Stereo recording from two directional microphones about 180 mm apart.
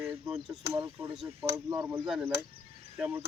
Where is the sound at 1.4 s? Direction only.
15° right (ahead or behind).